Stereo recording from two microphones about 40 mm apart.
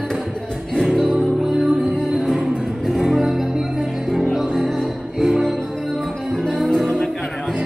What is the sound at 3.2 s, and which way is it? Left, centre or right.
Music, centre.